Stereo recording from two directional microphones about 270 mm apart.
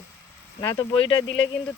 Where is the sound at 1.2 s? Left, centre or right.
Left.